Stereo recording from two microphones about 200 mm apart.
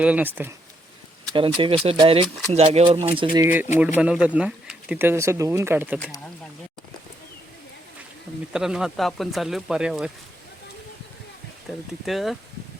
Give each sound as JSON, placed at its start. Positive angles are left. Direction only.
{"t": 0.0, "sound": "speech", "side_deg": -10}
{"t": 1.3, "sound": "speech", "side_deg": -25}
{"t": 3.3, "sound": "speech", "side_deg": -10}
{"t": 8.5, "sound": "speech", "side_deg": -5}
{"t": 12.0, "sound": "speech", "side_deg": 0}